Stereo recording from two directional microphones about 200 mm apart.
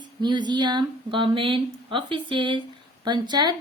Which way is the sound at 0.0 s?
20° right (ahead or behind).